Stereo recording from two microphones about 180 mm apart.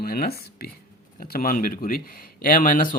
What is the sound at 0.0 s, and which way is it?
Speech, 55° left (ahead or behind).